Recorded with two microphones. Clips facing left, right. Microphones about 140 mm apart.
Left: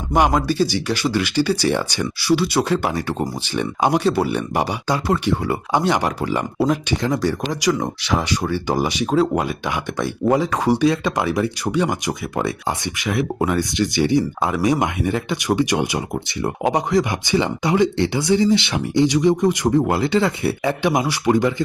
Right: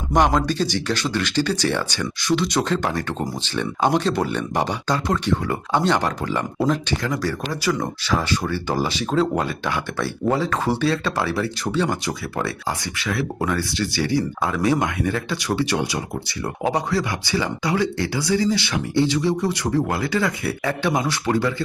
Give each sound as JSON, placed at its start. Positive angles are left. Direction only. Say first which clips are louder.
{"t": 0.1, "sound": "speech", "louder": "left 1 dB", "side_deg": 5}
{"t": 7.0, "sound": "speech", "louder": "left 4 dB", "side_deg": 20}